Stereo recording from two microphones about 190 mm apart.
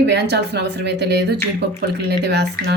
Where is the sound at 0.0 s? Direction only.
65° right (ahead or behind).